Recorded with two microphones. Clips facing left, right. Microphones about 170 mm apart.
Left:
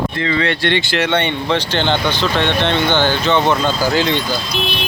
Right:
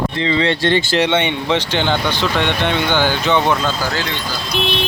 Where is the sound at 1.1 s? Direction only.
15° right (ahead or behind).